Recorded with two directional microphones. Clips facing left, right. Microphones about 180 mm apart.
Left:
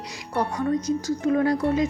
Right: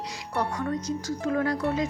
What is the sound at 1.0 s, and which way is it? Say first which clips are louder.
Speech: left 4 dB; 15° left (ahead or behind).